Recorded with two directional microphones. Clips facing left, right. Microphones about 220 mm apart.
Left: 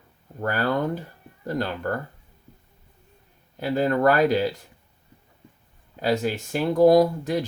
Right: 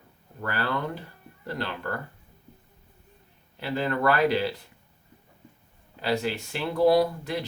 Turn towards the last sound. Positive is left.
turn(degrees=45)  # may be behind; listen again after turning